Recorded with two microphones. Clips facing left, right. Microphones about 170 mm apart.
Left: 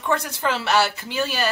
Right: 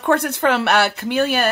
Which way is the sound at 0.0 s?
60° right (ahead or behind).